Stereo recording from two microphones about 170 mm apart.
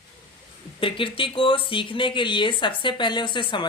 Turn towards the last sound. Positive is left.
turn(degrees=30)  # may be behind; listen again after turning